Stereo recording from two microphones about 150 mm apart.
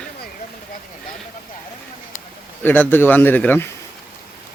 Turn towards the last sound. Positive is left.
turn(degrees=10)  # may be behind; listen again after turning